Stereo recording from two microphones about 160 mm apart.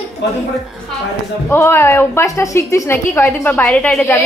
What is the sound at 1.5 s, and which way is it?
A woman's voice, 15° left (ahead or behind).